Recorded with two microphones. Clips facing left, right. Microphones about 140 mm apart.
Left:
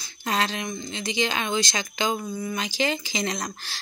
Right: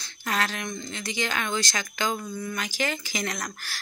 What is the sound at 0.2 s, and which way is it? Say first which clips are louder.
Speech: left 2 dB; 25° left (ahead or behind).